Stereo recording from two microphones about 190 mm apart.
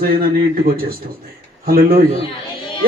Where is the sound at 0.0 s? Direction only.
50° right (ahead or behind).